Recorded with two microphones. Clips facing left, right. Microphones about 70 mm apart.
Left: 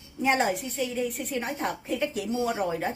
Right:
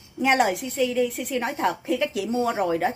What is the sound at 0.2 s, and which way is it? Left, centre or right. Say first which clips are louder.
A woman's voice: right 4 dB; right.